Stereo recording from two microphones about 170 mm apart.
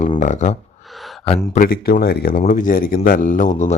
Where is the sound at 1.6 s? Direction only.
60° left (ahead or behind).